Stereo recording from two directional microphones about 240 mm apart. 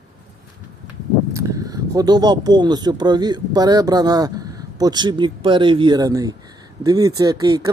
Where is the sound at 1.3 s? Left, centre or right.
Centre.